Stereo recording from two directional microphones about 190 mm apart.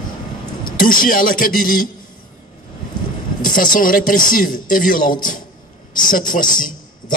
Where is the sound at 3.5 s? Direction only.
45° left (ahead or behind).